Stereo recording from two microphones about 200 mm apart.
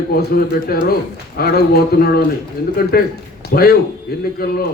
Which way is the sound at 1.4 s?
50° left (ahead or behind).